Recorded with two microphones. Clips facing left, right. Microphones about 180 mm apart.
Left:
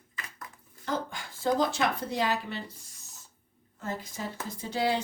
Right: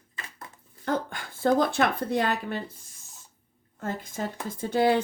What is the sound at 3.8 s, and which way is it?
Speech, 55° right (ahead or behind).